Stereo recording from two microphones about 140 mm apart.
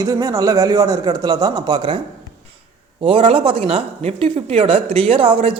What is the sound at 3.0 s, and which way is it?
Speech, 40° right (ahead or behind).